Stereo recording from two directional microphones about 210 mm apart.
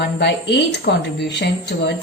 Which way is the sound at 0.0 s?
55° left (ahead or behind).